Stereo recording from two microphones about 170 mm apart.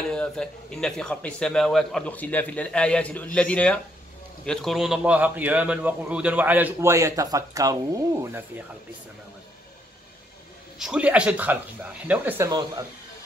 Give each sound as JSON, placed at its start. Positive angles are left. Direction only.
{"t": 0.1, "sound": "a man's voice", "side_deg": 5}
{"t": 10.8, "sound": "a man's voice", "side_deg": -5}
{"t": 12.4, "sound": "speech", "side_deg": -20}